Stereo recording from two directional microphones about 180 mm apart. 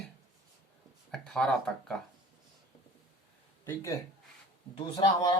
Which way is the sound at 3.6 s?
15° left (ahead or behind).